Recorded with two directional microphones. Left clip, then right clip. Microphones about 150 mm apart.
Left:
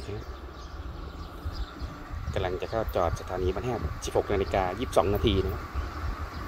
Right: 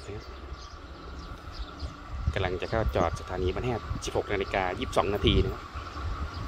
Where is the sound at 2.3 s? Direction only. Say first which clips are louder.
Even; 5° right (ahead or behind).